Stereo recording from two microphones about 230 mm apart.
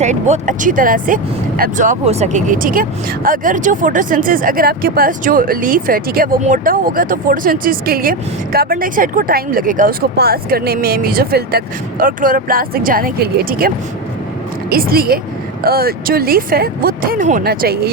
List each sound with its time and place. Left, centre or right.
0.0 s speech: right